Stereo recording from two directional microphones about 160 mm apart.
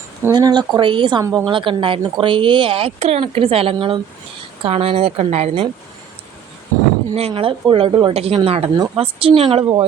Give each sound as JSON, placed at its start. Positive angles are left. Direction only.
{"t": 0.2, "sound": "speech", "side_deg": -25}
{"t": 1.2, "sound": "speech", "side_deg": -20}
{"t": 1.5, "sound": "speech", "side_deg": -30}
{"t": 7.1, "sound": "speech", "side_deg": -40}